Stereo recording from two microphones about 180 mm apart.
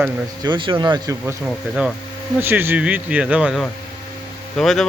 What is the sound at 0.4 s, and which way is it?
Speech, 25° right (ahead or behind).